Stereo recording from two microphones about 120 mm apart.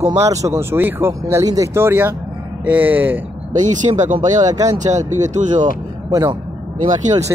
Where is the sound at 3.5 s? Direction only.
90° right.